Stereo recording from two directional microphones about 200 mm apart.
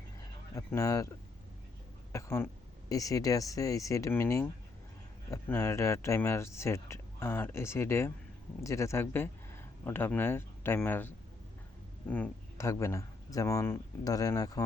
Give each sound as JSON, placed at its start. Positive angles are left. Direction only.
{"t": 0.5, "sound": "speech", "side_deg": 15}
{"t": 2.1, "sound": "speech", "side_deg": 15}